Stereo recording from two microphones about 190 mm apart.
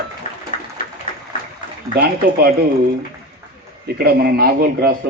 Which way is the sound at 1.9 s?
55° right (ahead or behind).